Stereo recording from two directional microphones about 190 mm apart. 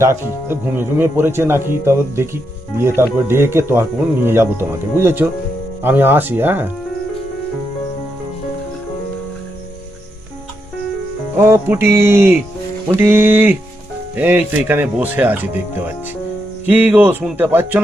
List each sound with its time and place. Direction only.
0.0 s speech: 10° right (ahead or behind)
11.3 s speech: 10° right (ahead or behind)